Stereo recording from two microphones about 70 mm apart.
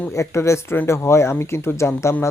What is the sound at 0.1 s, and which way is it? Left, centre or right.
Speech, left.